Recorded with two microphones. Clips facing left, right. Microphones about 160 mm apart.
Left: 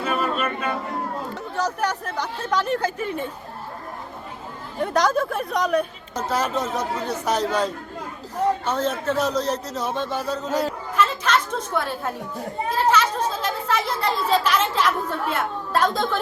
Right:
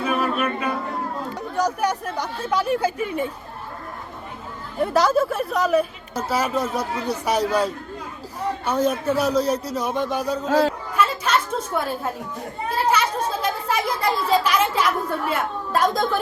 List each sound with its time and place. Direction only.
0.0 s music: 5° right (ahead or behind)
1.4 s a woman's voice: 10° right (ahead or behind)
4.8 s a woman's voice: 5° right (ahead or behind)
10.5 s speech: 90° right
10.9 s chatter: 10° right (ahead or behind)
12.7 s a child's voice: 10° right (ahead or behind)